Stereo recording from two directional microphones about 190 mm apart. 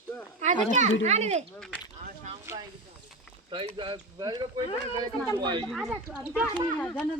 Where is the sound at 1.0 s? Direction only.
35° right (ahead or behind).